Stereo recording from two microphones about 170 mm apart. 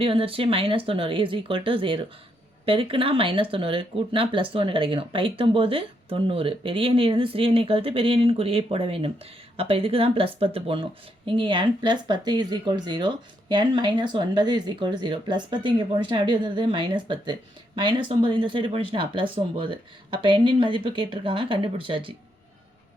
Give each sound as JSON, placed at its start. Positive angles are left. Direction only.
{"t": 0.0, "sound": "speech", "side_deg": -35}